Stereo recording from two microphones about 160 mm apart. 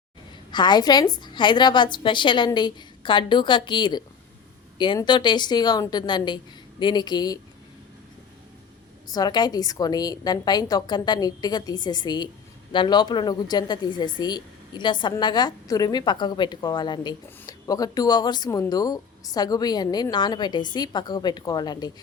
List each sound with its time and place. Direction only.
0.5 s a woman's voice: 25° left (ahead or behind)
9.0 s a woman's voice: 25° left (ahead or behind)